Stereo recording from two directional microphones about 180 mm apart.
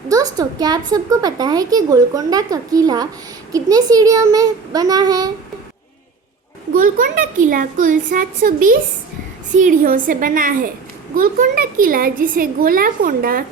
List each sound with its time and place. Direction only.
0.1 s a woman's voice: 20° right (ahead or behind)
6.7 s a woman's voice: 50° right (ahead or behind)